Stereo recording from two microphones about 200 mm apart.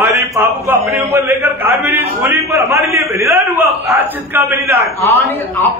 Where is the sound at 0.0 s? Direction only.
15° right (ahead or behind).